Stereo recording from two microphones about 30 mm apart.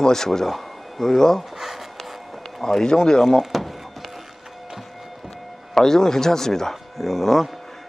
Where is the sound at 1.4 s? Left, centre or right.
Centre.